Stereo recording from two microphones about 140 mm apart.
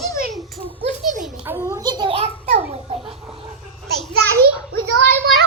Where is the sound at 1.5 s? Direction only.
20° left (ahead or behind).